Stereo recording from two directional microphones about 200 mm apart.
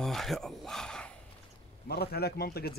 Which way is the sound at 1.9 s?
50° left (ahead or behind).